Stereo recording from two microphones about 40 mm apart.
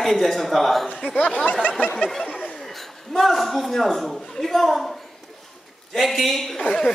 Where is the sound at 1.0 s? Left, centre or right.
Left.